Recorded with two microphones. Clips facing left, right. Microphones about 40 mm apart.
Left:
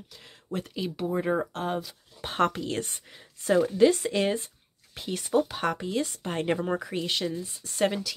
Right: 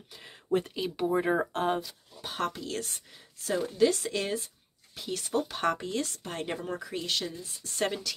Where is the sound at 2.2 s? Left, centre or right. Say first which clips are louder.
Left 7 dB; left.